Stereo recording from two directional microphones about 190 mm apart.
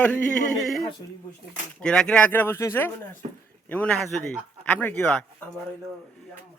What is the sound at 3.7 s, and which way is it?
A man's voice, 5° left (ahead or behind).